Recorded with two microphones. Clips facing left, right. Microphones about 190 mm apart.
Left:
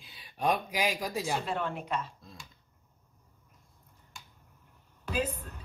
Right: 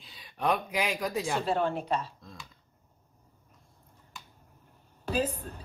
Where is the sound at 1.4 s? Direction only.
35° right (ahead or behind).